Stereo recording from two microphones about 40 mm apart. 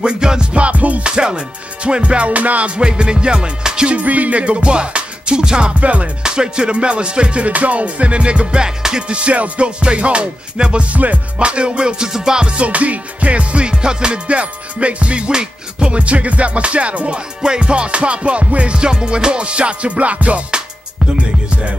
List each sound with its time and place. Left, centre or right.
0.0 s music: right
1.1 s music: right
2.7 s music: right
3.9 s music: right; by 5.7 s centre
5.8 s music: right
6.2 s music: centre
8.6 s music: centre
9.1 s music: right
16.0 s music: right